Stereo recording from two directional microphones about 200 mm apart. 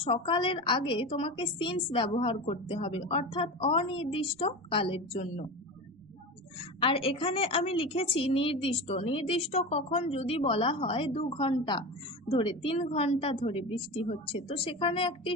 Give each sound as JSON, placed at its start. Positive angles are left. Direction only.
{"t": 0.0, "sound": "a woman's voice", "side_deg": 30}
{"t": 6.8, "sound": "a woman's voice", "side_deg": 30}